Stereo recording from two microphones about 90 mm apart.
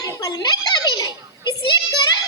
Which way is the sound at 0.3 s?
50° left (ahead or behind).